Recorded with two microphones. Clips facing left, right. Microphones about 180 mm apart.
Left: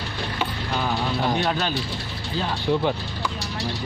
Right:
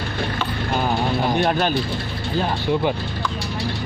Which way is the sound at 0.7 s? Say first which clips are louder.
Right 5 dB; 50° right (ahead or behind).